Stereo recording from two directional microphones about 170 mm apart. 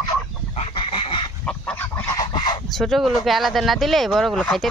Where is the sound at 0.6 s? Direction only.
30° left (ahead or behind).